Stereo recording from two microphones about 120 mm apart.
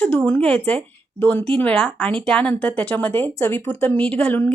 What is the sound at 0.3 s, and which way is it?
Speech, 10° left (ahead or behind).